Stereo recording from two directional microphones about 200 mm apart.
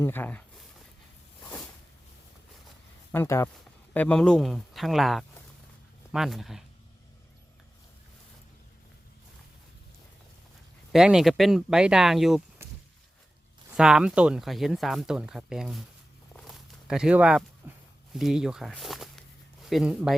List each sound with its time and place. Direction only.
0.0 s speech: 10° left (ahead or behind)
3.1 s speech: 15° left (ahead or behind)
10.9 s speech: 5° right (ahead or behind)
13.7 s speech: 5° right (ahead or behind)
16.3 s walk: centre (ahead or behind)
17.6 s a sound: 10° right (ahead or behind)
18.1 s speech: centre (ahead or behind)